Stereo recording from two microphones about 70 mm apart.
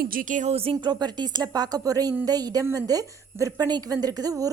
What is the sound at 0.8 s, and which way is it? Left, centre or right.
Speech, right.